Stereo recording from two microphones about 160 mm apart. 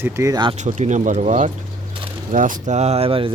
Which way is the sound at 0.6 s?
50° right (ahead or behind).